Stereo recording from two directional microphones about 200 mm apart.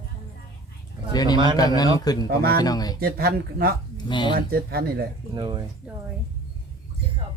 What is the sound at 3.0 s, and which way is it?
Speech, 50° right (ahead or behind).